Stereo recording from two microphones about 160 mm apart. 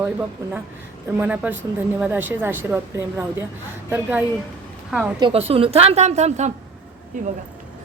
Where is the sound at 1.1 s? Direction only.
10° right (ahead or behind).